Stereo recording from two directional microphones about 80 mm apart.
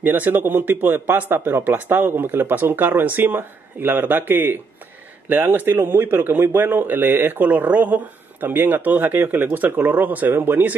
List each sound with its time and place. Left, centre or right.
0.0 s speech: right